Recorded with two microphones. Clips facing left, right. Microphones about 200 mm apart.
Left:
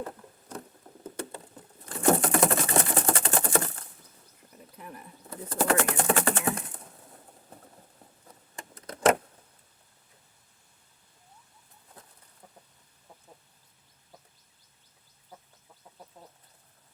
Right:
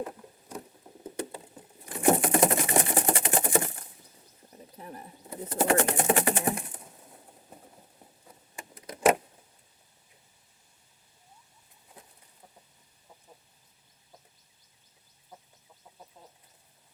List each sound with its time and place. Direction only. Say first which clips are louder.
0.0 s patter: right 1 dB; 10° right (ahead or behind)
4.5 s wild animals: right 2 dB; 35° right (ahead or behind)
5.2 s bird: right 1 dB; 20° right (ahead or behind)
8.3 s a sound: left 1 dB; 10° right (ahead or behind)